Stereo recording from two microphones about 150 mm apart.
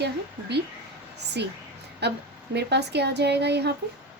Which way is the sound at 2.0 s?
90° right.